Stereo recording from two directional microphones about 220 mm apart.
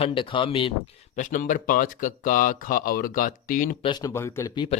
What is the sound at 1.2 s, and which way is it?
Speech, 35° left (ahead or behind).